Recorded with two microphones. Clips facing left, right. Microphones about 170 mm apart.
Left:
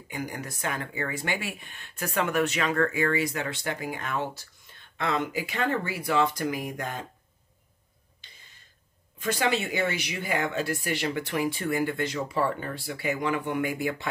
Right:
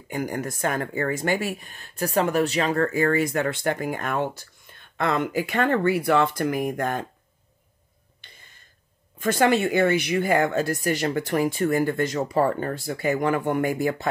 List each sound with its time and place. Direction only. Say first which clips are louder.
0.1 s speech: right 7 dB; 45° right (ahead or behind)
8.2 s a sound: right 4 dB; 55° right (ahead or behind)
9.2 s speech: right 7 dB; 50° right (ahead or behind)